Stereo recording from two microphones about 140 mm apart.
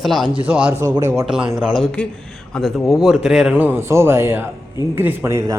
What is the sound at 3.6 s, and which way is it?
A man's voice, 15° right (ahead or behind).